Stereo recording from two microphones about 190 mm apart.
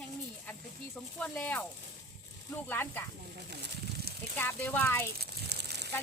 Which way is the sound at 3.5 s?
60° right (ahead or behind).